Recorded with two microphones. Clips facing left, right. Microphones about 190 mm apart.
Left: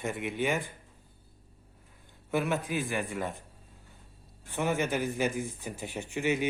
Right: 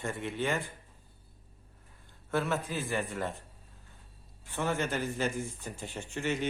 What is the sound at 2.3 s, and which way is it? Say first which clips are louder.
Speech: left 2 dB; 15° left (ahead or behind).